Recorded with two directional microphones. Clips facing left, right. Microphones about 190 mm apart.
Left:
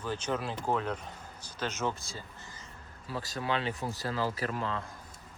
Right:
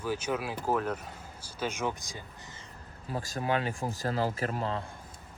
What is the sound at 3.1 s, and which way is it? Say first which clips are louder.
Speech: right 3 dB; 45° right (ahead or behind).